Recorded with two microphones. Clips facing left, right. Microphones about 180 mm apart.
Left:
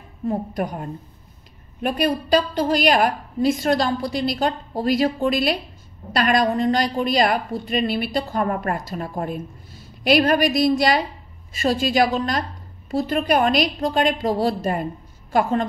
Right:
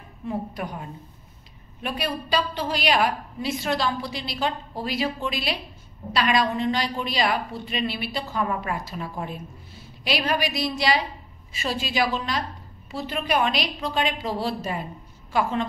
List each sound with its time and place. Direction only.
0.2 s a woman's voice: 45° left (ahead or behind)